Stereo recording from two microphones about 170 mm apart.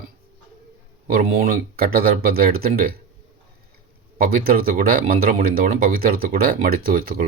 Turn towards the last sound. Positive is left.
turn(degrees=-55)  # may be behind; listen again after turning